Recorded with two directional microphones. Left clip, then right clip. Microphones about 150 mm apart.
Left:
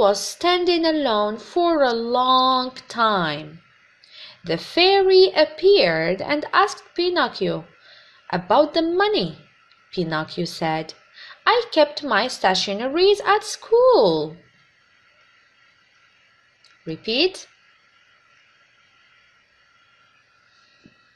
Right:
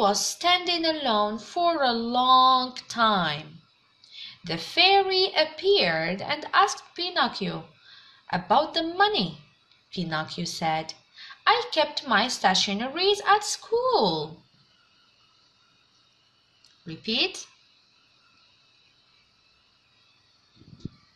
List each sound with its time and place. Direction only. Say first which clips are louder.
0.0 s a woman's voice: left 5 dB; 45° left (ahead or behind)
16.8 s a woman's voice: left 6 dB; 50° left (ahead or behind)